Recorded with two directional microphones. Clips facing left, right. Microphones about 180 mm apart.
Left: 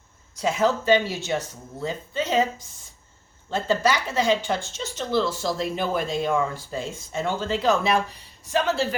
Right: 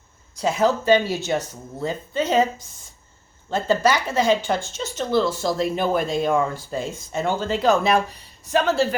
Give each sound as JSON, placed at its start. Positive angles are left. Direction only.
{"t": 0.3, "sound": "speech", "side_deg": -35}